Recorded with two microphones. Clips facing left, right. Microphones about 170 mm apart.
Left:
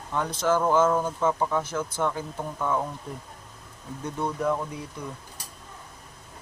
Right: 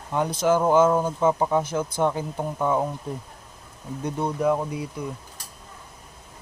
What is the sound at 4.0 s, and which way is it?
Speech, 15° right (ahead or behind).